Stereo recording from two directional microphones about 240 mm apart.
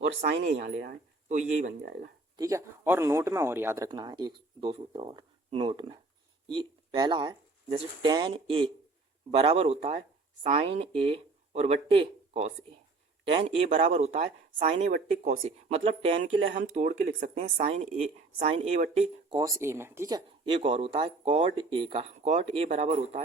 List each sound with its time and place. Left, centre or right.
0.5 s speech: right
2.3 s speech: centre
19.3 s speech: centre